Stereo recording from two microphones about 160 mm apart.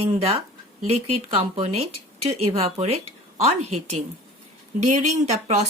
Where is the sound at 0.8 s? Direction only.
40° right (ahead or behind).